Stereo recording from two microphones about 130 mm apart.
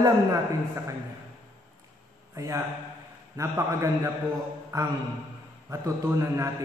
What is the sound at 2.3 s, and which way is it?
A man's voice, 25° right (ahead or behind).